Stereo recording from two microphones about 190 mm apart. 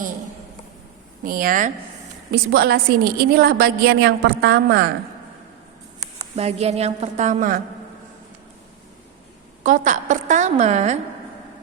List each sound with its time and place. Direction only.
1.2 s a woman's voice: 50° right (ahead or behind)
2.3 s a woman's voice: 55° right (ahead or behind)
6.1 s a woman's voice: 35° right (ahead or behind)
9.6 s a woman's voice: 40° right (ahead or behind)